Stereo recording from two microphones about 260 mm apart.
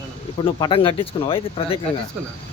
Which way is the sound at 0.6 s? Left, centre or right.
Centre.